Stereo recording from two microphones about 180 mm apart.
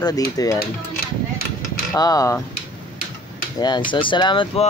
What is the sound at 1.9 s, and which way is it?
Speech, 20° left (ahead or behind).